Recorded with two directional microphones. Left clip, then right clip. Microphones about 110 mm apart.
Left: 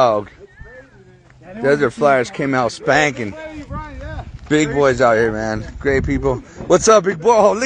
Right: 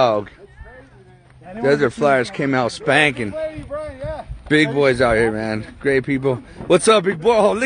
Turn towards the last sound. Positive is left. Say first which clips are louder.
# left 3 dB
turn(degrees=-20)  # may be behind; listen again after turning